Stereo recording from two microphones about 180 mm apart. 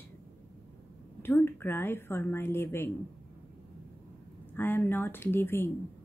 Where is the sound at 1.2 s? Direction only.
10° left (ahead or behind).